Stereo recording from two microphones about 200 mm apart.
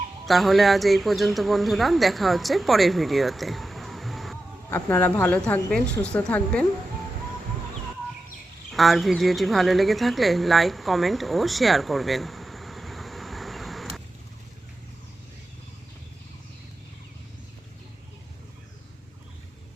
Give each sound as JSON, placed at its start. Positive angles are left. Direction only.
{"t": 0.3, "sound": "a woman's voice", "side_deg": 0}
{"t": 8.7, "sound": "speech", "side_deg": 0}